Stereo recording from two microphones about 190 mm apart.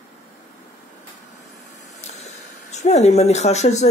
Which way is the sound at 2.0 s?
35° left (ahead or behind).